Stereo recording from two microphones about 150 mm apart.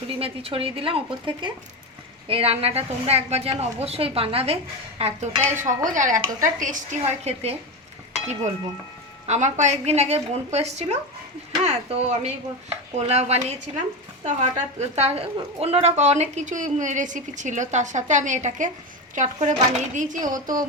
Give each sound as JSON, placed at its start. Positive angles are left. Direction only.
{"t": 0.1, "sound": "a woman's voice", "side_deg": -40}
{"t": 5.6, "sound": "speech", "side_deg": -60}
{"t": 7.0, "sound": "a woman's voice", "side_deg": -45}
{"t": 9.2, "sound": "a woman's voice", "side_deg": -50}